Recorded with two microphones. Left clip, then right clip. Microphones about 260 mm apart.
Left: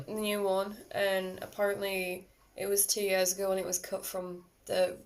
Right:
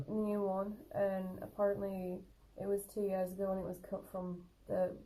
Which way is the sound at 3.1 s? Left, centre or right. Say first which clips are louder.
Left 9 dB; left.